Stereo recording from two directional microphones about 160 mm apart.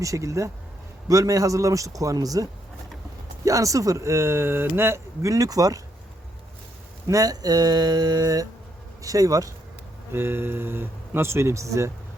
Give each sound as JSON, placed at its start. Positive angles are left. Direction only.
{"t": 0.0, "sound": "speech", "side_deg": -20}
{"t": 7.1, "sound": "speech", "side_deg": -20}